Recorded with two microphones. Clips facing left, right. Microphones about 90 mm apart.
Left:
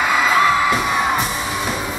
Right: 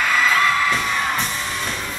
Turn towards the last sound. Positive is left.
turn(degrees=15)  # may be behind; listen again after turning